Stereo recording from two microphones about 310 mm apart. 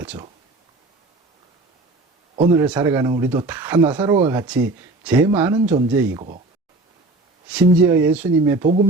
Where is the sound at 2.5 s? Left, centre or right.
Centre.